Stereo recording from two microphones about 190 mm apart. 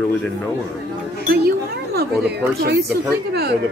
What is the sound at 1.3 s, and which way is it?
A man's voice, 55° right (ahead or behind).